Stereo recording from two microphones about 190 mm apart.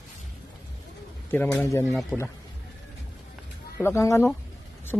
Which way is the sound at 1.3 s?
15° left (ahead or behind).